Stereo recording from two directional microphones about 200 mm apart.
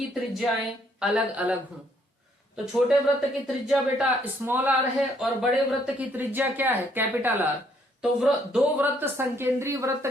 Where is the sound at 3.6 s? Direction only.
5° right (ahead or behind).